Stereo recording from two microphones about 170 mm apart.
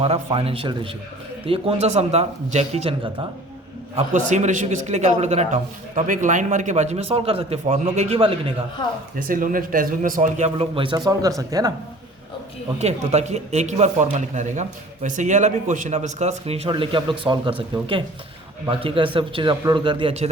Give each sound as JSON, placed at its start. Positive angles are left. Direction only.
{"t": 0.0, "sound": "a man's voice", "side_deg": -35}
{"t": 8.8, "sound": "speech", "side_deg": 25}
{"t": 9.1, "sound": "speech", "side_deg": -55}
{"t": 12.8, "sound": "speech", "side_deg": -40}
{"t": 18.7, "sound": "a man's voice", "side_deg": -30}